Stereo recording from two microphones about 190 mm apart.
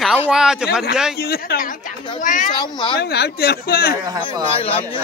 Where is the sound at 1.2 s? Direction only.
55° left (ahead or behind).